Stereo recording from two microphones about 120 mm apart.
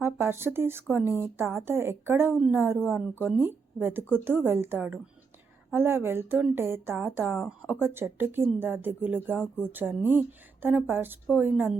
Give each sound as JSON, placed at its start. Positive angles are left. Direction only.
{"t": 0.0, "sound": "a woman's voice", "side_deg": -20}